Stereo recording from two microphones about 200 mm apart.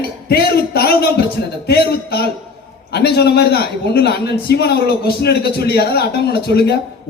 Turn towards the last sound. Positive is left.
turn(degrees=55)  # may be behind; listen again after turning